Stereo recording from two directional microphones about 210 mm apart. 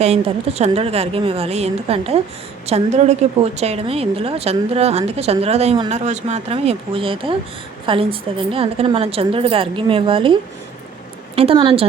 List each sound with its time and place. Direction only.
0.0 s a woman's voice: 30° right (ahead or behind)
11.3 s a woman's voice: 25° right (ahead or behind)